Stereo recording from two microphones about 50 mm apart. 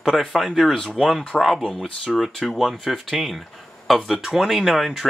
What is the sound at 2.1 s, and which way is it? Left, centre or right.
Speech, centre.